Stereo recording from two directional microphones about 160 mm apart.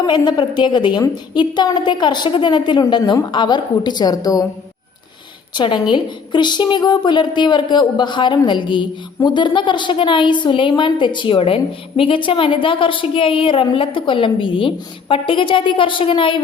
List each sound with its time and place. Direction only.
0.0 s a woman's voice: 25° left (ahead or behind)
5.5 s a woman's voice: 30° left (ahead or behind)